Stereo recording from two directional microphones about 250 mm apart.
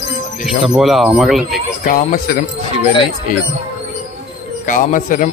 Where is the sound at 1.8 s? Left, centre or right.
Left.